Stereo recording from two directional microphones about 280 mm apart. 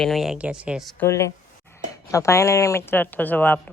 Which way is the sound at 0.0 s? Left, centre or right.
Centre.